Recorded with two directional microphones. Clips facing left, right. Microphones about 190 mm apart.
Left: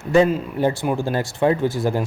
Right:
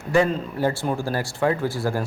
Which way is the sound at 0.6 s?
20° left (ahead or behind).